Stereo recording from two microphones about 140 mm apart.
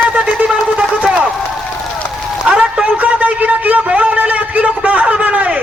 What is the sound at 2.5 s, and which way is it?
A man's voice, 10° right (ahead or behind).